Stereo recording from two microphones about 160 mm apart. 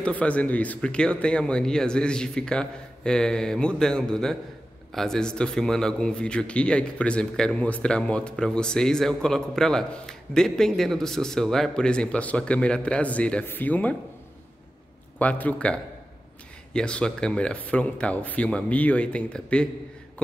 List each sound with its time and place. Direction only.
0.0 s a man's voice: 10° left (ahead or behind)
15.1 s speech: 10° left (ahead or behind)